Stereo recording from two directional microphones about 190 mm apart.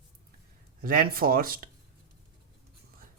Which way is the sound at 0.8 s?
50° right (ahead or behind).